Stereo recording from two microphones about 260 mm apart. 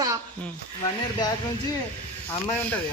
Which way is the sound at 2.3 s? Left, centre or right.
Centre.